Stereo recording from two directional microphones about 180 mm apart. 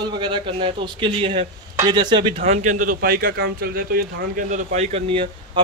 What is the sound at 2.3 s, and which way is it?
Speech, 40° right (ahead or behind).